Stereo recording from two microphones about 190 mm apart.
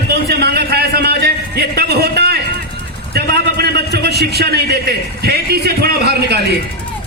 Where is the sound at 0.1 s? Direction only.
60° right (ahead or behind).